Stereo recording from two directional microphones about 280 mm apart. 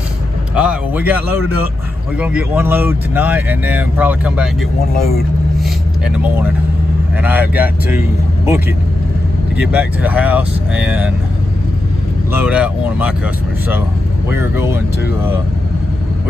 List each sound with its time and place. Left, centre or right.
0.6 s speech: centre
2.1 s speech: centre
4.9 s speech: left
5.6 s vehicle: centre
7.2 s speech: centre
9.6 s speech: centre
12.3 s speech: centre
14.3 s speech: centre